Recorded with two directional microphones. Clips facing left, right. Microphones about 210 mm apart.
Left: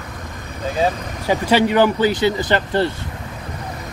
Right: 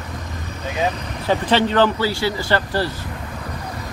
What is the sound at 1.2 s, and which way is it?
Speech, 10° left (ahead or behind).